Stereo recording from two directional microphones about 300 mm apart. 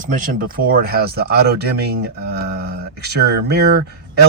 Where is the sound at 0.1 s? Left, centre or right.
Right.